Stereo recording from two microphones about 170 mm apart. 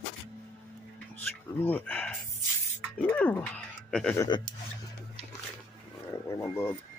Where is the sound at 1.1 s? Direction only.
10° left (ahead or behind).